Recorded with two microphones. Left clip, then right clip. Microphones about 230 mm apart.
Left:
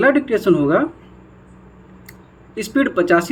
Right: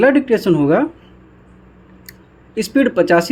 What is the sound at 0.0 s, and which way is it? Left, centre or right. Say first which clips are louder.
Speech: right 2 dB; right.